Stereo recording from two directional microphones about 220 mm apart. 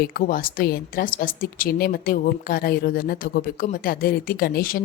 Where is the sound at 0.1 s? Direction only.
40° left (ahead or behind).